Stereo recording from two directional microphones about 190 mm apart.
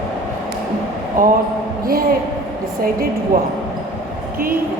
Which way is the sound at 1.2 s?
45° right (ahead or behind).